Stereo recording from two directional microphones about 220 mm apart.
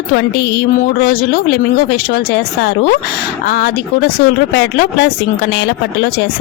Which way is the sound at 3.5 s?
45° left (ahead or behind).